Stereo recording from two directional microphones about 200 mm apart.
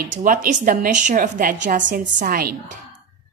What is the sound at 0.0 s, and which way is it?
A woman's voice, 45° right (ahead or behind).